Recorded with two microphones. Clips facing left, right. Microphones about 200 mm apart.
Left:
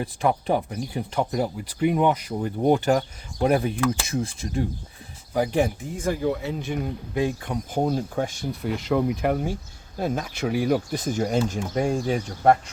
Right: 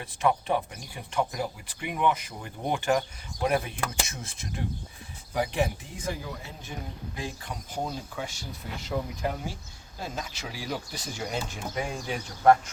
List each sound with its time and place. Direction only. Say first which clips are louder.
0.0 s speech: left 3 dB; 35° left (ahead or behind)
5.4 s speech: left 5 dB; 45° left (ahead or behind); by 6.7 s 70° left (ahead or behind)
7.2 s speech: left 13 dB; 55° left (ahead or behind); by 12.7 s 35° left (ahead or behind)